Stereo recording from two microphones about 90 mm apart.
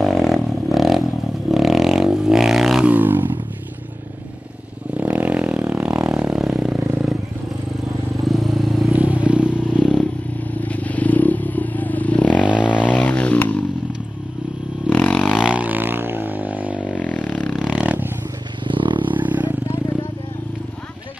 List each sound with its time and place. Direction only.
0.0 s a sound: centre (ahead or behind)
1.5 s vehicle: centre (ahead or behind)
2.8 s a sound: 20° right (ahead or behind)
4.9 s vehicle: 15° right (ahead or behind)
8.3 s vehicle: centre (ahead or behind)
8.9 s vehicle: 15° right (ahead or behind)
10.6 s vehicle: 15° left (ahead or behind)
14.9 s vehicle: 15° left (ahead or behind)
15.3 s vehicle: 10° right (ahead or behind)
16.9 s a sound: 15° left (ahead or behind)
17.6 s dog: 15° right (ahead or behind)
18.6 s wild animals: 65° right (ahead or behind)
19.1 s wild animals: 20° right (ahead or behind)